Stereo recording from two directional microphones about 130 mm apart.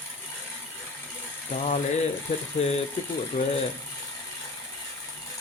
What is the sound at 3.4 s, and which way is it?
Speech, 90° left.